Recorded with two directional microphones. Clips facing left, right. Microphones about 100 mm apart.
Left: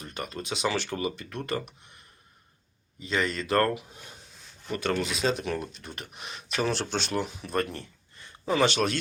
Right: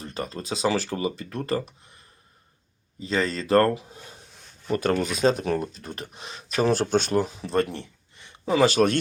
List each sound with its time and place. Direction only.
0.0 s speech: 30° right (ahead or behind)
3.0 s speech: 30° right (ahead or behind)